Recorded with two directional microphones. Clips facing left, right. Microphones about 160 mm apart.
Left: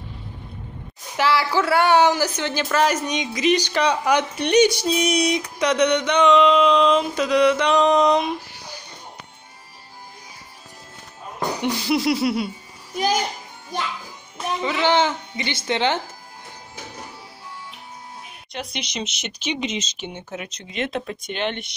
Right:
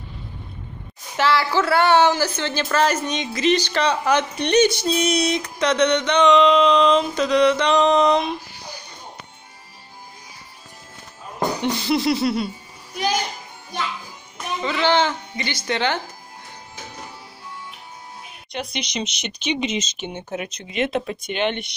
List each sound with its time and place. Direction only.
1.1 s speech: 10° left (ahead or behind)
11.6 s speech: 10° left (ahead or behind)
14.6 s speech: 15° left (ahead or behind)
18.5 s speech: centre (ahead or behind)
19.8 s speech: 20° right (ahead or behind)